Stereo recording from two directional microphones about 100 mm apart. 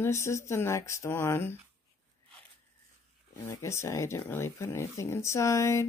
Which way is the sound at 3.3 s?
30° left (ahead or behind).